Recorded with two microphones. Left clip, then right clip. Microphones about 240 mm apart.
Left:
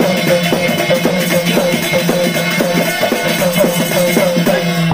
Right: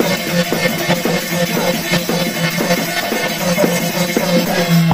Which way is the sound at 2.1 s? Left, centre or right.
Right.